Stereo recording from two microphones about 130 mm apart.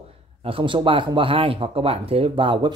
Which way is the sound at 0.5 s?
40° right (ahead or behind).